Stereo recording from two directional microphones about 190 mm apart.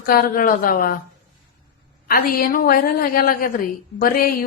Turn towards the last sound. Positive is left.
turn(degrees=50)  # may be behind; listen again after turning